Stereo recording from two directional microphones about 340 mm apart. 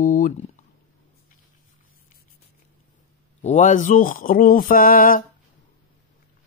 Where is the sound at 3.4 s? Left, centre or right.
Left.